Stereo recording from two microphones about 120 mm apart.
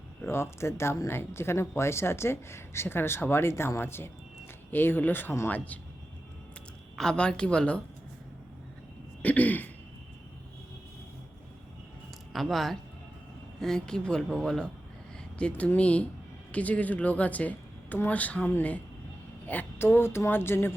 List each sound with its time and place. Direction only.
0.3 s a woman's voice: 20° left (ahead or behind)
6.9 s a woman's voice: 5° left (ahead or behind)
9.2 s a woman's voice: 15° left (ahead or behind)
12.3 s a woman's voice: centre (ahead or behind); by 20.7 s 20° left (ahead or behind)